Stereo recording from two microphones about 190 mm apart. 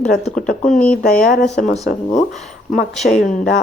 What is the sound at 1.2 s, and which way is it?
Speech, 45° left (ahead or behind).